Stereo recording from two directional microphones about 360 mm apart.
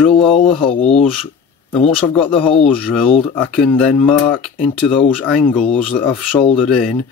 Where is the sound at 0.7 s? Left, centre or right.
Centre.